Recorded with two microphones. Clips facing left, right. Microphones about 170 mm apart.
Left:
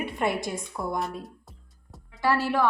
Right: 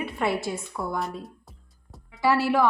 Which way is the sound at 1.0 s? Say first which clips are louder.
Even; centre (ahead or behind).